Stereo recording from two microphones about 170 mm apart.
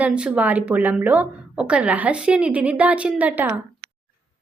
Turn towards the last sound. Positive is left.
turn(degrees=-10)  # may be behind; listen again after turning